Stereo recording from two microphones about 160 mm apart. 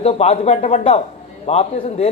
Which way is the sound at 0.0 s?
40° left (ahead or behind).